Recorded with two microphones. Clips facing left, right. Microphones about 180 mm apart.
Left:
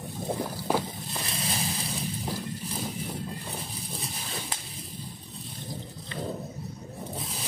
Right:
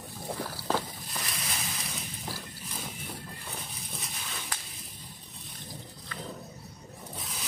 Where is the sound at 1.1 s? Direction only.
30° left (ahead or behind).